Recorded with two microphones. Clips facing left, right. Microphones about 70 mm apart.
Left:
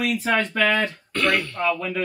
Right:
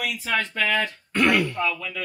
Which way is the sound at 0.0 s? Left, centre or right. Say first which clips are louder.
Left 4 dB; left.